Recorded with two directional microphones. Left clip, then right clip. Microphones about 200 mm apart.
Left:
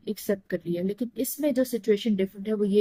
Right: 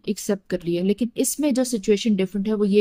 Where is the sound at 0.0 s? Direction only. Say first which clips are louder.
Right 3 dB; 55° right (ahead or behind).